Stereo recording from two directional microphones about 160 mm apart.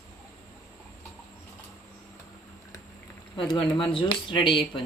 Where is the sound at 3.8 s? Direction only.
30° left (ahead or behind).